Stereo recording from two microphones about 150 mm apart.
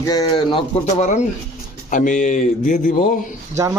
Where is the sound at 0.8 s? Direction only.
50° left (ahead or behind).